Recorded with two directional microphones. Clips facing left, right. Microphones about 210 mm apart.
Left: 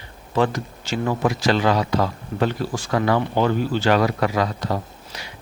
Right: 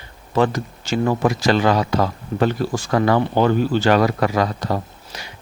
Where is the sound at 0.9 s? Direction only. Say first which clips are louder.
Right 3 dB; 45° right (ahead or behind).